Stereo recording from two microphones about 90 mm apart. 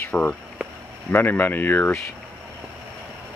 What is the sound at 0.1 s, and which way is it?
Speech, 10° left (ahead or behind).